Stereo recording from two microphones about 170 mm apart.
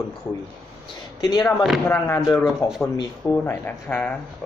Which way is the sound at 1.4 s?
Centre (ahead or behind).